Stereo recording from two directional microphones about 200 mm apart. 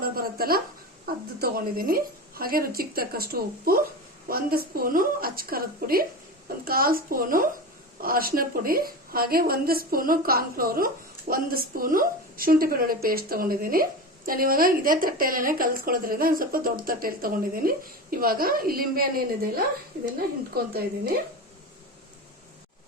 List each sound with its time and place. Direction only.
0.0 s a woman's voice: 50° right (ahead or behind)